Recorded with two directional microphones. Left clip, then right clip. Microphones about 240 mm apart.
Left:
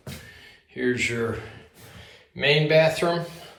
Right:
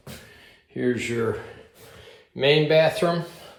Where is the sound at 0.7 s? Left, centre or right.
Right.